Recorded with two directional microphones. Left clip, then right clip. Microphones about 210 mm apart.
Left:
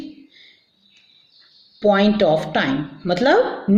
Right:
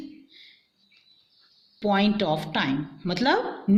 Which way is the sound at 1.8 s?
35° right (ahead or behind).